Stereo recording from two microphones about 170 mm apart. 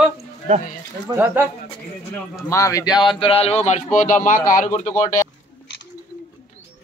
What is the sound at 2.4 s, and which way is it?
Speech, 15° left (ahead or behind).